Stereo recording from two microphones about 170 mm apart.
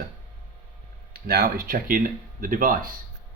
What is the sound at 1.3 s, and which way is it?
Speech, 60° right (ahead or behind).